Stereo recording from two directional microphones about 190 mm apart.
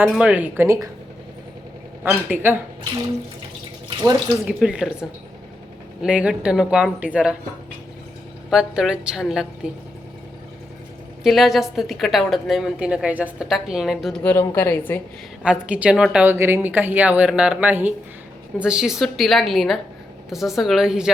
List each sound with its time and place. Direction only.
0.0 s speech: 5° right (ahead or behind)
2.0 s speech: 10° right (ahead or behind)
4.4 s a woman's voice: 5° right (ahead or behind)
8.4 s a woman's voice: centre (ahead or behind)
11.2 s a woman's voice: centre (ahead or behind)
15.4 s a woman's voice: 5° right (ahead or behind)